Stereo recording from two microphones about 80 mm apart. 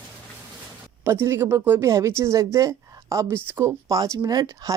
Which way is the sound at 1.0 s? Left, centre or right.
Right.